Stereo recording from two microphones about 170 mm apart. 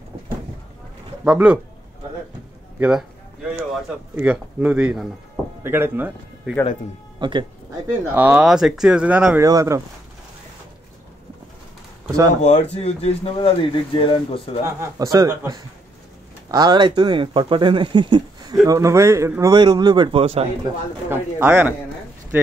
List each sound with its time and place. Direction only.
1.2 s speech: 5° right (ahead or behind)
2.8 s speech: 5° right (ahead or behind)
7.2 s speech: 30° right (ahead or behind)
8.1 s speech: 10° right (ahead or behind)
12.4 s speech: 40° left (ahead or behind)
14.8 s speech: 20° right (ahead or behind)
21.1 s speech: 10° right (ahead or behind)